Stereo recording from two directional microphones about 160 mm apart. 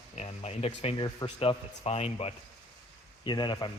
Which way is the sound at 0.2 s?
40° left (ahead or behind).